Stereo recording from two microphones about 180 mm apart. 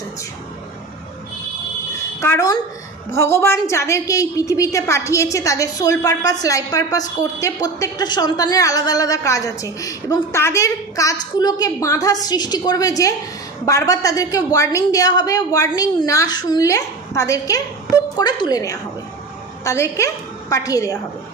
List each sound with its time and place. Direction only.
2.2 s a woman's voice: 15° left (ahead or behind)